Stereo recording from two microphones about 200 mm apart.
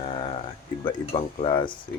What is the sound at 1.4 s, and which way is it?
Speech, 25° left (ahead or behind).